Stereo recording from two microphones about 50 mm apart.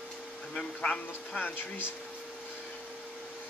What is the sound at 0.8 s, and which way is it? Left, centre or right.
Speech, centre.